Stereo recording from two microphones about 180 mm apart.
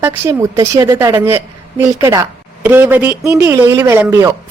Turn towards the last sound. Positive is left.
turn(degrees=-15)  # may be behind; listen again after turning